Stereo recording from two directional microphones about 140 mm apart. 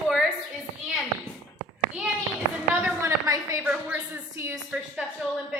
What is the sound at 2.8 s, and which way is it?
Speech, 10° right (ahead or behind).